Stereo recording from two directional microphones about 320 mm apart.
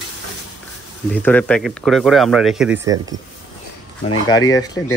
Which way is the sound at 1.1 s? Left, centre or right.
Centre.